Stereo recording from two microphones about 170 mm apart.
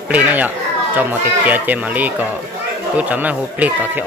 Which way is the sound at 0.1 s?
10° right (ahead or behind).